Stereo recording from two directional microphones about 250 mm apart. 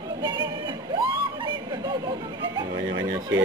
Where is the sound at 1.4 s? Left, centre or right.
Centre.